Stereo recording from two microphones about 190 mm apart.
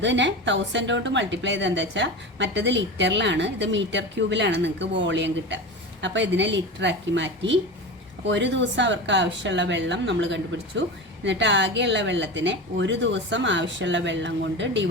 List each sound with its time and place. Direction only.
0.0 s speech: 70° right (ahead or behind)